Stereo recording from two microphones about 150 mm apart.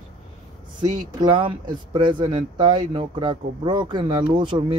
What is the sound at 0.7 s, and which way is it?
Speech, 30° right (ahead or behind).